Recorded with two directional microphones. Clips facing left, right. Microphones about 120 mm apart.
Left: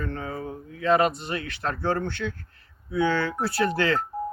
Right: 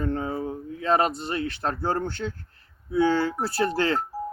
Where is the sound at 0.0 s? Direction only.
35° right (ahead or behind).